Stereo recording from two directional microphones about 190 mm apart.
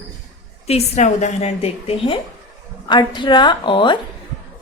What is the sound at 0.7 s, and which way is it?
A woman's voice, 35° left (ahead or behind).